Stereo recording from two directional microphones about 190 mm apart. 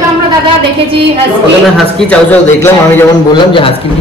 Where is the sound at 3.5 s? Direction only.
30° left (ahead or behind).